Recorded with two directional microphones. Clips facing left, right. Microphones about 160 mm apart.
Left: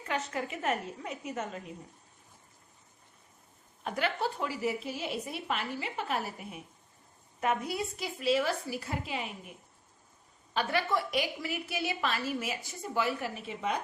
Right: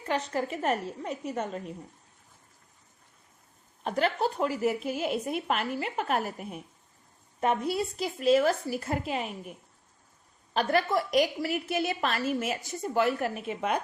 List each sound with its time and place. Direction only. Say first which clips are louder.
0.0 s a woman's voice: right 4 dB; 35° right (ahead or behind)
3.8 s a woman's voice: right 5 dB; 40° right (ahead or behind)
7.9 s a woman's voice: right 6 dB; 45° right (ahead or behind)
10.5 s a woman's voice: right 4 dB; 45° right (ahead or behind); by 13.7 s 60° right (ahead or behind)